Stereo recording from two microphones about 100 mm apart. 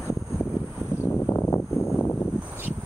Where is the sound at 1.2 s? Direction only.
20° left (ahead or behind).